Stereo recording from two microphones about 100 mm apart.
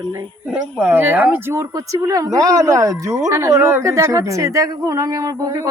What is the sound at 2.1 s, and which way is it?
Speech, 35° right (ahead or behind).